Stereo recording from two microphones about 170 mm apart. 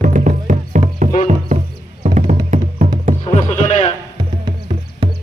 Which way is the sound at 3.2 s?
40° left (ahead or behind).